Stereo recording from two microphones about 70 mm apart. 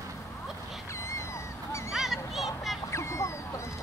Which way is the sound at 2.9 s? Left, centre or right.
Left.